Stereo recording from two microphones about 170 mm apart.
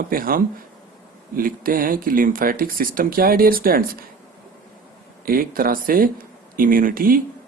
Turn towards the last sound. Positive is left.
turn(degrees=-55)  # may be behind; listen again after turning